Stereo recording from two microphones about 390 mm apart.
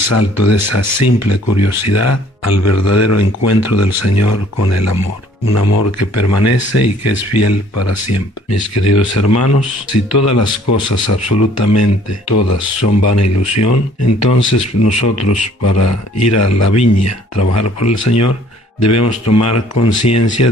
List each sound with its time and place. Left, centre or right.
0.1 s speech: left